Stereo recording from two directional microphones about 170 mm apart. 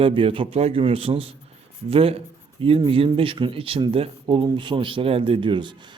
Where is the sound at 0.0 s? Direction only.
30° right (ahead or behind).